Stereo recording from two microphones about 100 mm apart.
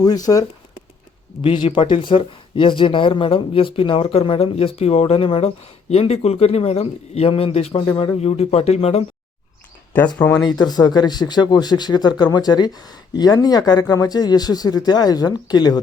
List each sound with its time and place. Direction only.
0.0 s speech: 40° left (ahead or behind)
1.4 s speech: 55° left (ahead or behind)
5.9 s speech: 90° left
10.6 s speech: 45° left (ahead or behind)